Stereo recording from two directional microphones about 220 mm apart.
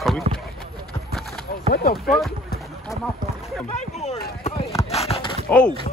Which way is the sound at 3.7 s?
30° left (ahead or behind).